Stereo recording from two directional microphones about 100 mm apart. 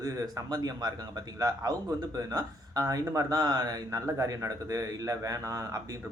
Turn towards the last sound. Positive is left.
turn(degrees=-35)  # may be behind; listen again after turning